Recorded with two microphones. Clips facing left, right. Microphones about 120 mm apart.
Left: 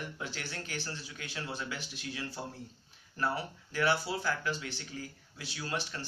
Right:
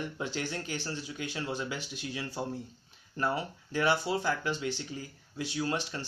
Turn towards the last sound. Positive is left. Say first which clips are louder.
# right 5 dB
turn(degrees=-20)  # may be behind; listen again after turning